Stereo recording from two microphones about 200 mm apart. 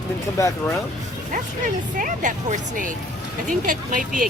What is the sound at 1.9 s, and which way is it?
Speech, 40° right (ahead or behind).